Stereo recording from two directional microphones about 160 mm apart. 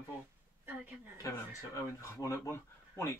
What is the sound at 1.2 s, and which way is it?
Speech, 20° left (ahead or behind).